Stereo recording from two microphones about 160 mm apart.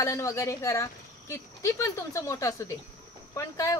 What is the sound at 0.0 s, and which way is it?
Speech, 20° left (ahead or behind).